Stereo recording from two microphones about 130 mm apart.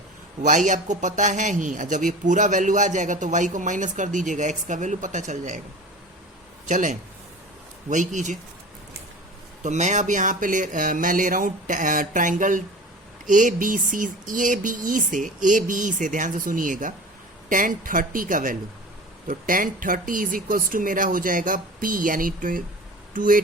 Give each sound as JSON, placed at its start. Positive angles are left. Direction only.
{"t": 0.4, "sound": "a man's voice", "side_deg": -75}
{"t": 6.7, "sound": "a man's voice", "side_deg": -70}
{"t": 9.6, "sound": "speech", "side_deg": -65}
{"t": 13.2, "sound": "a sound", "side_deg": -90}
{"t": 23.1, "sound": "speech", "side_deg": -90}